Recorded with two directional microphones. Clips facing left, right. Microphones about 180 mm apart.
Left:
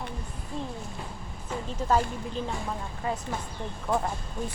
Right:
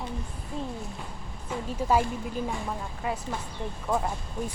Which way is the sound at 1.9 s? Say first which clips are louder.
Right 1 dB; 10° right (ahead or behind).